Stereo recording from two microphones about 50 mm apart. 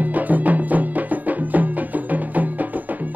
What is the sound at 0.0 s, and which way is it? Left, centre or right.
Music, right.